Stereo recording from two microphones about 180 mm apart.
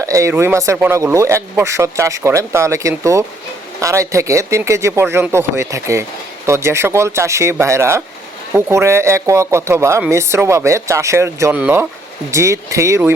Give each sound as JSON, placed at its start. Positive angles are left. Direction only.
{"t": 0.0, "sound": "speech", "side_deg": -15}